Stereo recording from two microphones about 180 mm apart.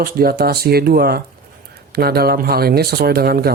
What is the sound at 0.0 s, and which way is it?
Speech, 55° right (ahead or behind).